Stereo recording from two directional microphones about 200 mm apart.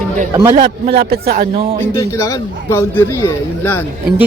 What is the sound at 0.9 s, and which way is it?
Speech, 55° right (ahead or behind).